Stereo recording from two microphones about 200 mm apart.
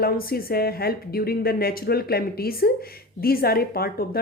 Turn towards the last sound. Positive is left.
turn(degrees=50)  # may be behind; listen again after turning